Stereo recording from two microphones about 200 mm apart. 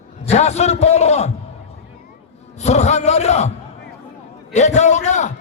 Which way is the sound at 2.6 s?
35° left (ahead or behind).